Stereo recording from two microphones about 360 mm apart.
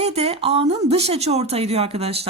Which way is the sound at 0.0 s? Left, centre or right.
Centre.